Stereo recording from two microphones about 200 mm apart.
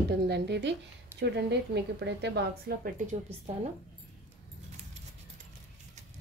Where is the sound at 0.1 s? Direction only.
55° right (ahead or behind).